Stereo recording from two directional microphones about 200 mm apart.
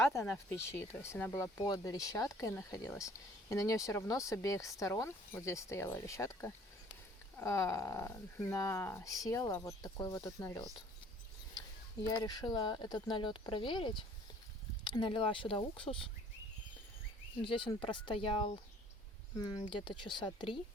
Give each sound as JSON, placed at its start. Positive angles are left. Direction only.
{"t": 0.0, "sound": "speech", "side_deg": 15}
{"t": 12.2, "sound": "speech", "side_deg": 20}
{"t": 17.7, "sound": "speech", "side_deg": 25}